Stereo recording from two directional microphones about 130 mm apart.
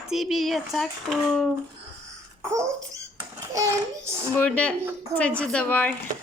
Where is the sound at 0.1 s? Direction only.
Centre (ahead or behind).